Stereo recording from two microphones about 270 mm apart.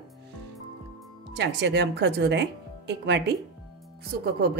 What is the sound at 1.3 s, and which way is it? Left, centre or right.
A woman's voice, right.